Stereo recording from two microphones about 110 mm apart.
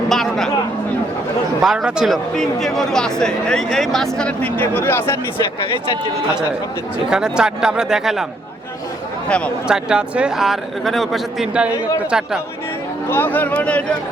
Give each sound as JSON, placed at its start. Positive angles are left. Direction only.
{"t": 0.1, "sound": "a sound", "side_deg": 5}
{"t": 1.6, "sound": "a man's voice", "side_deg": -5}
{"t": 7.1, "sound": "a man's voice", "side_deg": -5}
{"t": 9.6, "sound": "a man's voice", "side_deg": -5}
{"t": 13.1, "sound": "speech", "side_deg": 20}